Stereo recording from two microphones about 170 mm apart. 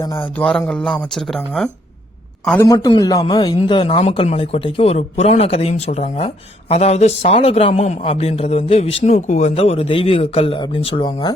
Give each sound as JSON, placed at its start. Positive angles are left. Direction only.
{"t": 0.0, "sound": "a man's voice", "side_deg": 20}
{"t": 0.3, "sound": "a man's voice", "side_deg": 5}
{"t": 2.6, "sound": "a man's voice", "side_deg": 25}